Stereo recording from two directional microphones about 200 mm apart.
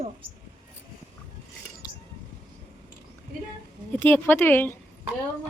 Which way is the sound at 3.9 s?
10° left (ahead or behind).